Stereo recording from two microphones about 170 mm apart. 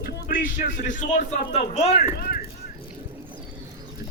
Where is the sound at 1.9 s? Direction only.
65° left (ahead or behind).